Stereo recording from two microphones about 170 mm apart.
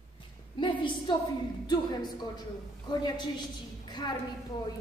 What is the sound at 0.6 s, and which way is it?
A woman's voice, 30° left (ahead or behind).